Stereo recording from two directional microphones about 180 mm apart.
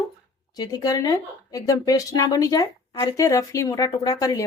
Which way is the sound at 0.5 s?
20° left (ahead or behind).